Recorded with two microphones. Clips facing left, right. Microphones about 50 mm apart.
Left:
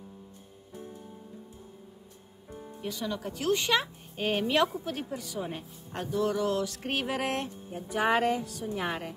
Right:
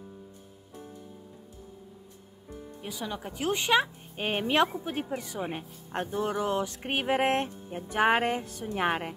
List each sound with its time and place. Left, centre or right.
2.8 s a woman's voice: centre
4.3 s a woman's voice: right